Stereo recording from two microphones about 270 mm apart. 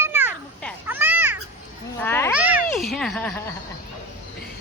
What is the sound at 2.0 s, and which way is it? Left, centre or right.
Speech, centre.